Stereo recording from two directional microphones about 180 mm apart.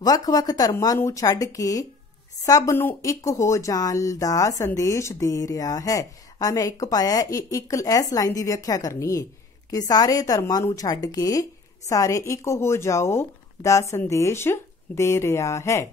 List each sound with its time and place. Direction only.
0.0 s speech: 20° left (ahead or behind)